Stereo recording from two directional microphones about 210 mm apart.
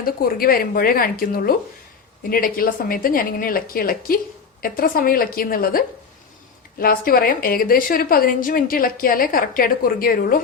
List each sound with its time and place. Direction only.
0.0 s a woman's voice: 45° left (ahead or behind)